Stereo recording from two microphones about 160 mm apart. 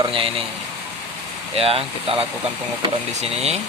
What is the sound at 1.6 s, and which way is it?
Speech, 35° right (ahead or behind).